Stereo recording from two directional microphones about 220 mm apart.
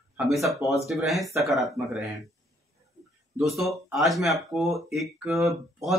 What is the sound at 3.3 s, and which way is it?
Speech, centre (ahead or behind).